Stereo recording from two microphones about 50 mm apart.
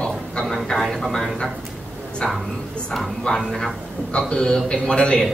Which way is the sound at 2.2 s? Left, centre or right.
Centre.